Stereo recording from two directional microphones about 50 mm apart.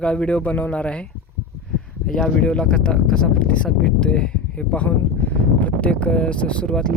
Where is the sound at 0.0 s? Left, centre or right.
Left.